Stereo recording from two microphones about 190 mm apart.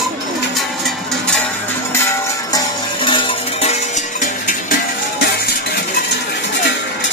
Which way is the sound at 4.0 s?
45° left (ahead or behind).